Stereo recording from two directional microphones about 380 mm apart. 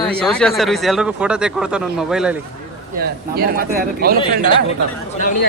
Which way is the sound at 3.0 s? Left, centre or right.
Right.